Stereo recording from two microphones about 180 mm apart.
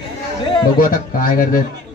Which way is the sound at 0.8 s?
50° left (ahead or behind).